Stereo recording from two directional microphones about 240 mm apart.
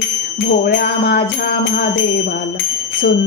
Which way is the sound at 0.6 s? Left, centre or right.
Left.